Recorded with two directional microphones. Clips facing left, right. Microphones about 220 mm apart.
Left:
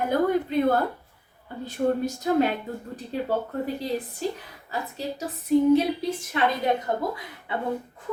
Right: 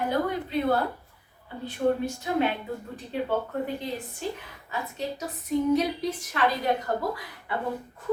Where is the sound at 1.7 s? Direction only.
40° left (ahead or behind).